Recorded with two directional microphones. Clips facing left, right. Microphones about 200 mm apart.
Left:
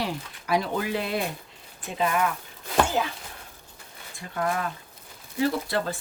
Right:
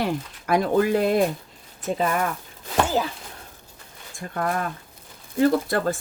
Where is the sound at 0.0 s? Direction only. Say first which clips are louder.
Right 5 dB; 50° right (ahead or behind).